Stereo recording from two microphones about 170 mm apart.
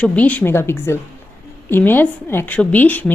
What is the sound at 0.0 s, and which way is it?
A woman's voice, 10° left (ahead or behind).